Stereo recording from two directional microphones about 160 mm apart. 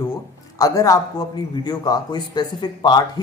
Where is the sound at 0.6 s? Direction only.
20° left (ahead or behind).